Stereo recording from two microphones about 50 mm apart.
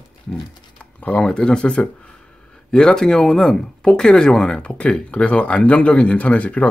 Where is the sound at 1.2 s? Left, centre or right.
Centre.